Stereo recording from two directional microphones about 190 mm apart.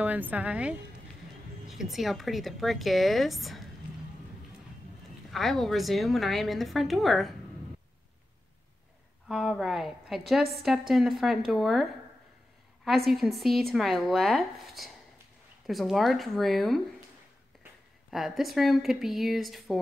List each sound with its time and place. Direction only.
0.0 s a woman's voice: 10° right (ahead or behind)
5.3 s a woman's voice: centre (ahead or behind)
9.3 s a woman's voice: centre (ahead or behind)
18.1 s a woman's voice: centre (ahead or behind)